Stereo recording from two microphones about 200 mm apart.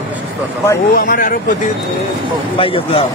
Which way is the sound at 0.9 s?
50° left (ahead or behind).